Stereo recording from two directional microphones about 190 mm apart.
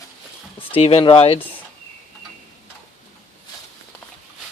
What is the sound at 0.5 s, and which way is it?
Speech, 30° left (ahead or behind).